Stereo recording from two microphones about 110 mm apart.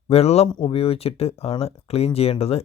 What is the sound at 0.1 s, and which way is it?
Speech, 70° left (ahead or behind).